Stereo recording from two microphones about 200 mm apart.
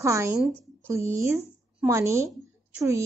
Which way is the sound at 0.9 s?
15° right (ahead or behind).